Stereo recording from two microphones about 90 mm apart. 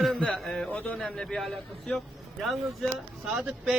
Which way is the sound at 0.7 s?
15° left (ahead or behind).